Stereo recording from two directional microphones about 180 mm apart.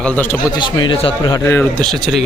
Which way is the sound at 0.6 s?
25° left (ahead or behind).